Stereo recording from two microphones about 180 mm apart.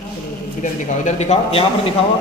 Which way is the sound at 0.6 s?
40° left (ahead or behind).